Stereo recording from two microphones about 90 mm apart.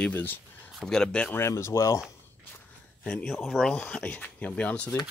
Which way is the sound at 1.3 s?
30° left (ahead or behind).